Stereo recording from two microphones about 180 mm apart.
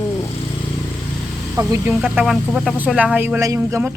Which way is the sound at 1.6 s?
20° right (ahead or behind).